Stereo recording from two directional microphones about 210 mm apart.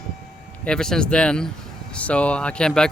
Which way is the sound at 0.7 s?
5° left (ahead or behind).